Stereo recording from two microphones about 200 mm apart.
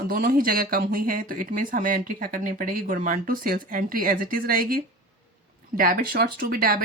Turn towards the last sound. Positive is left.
turn(degrees=-45)  # may be behind; listen again after turning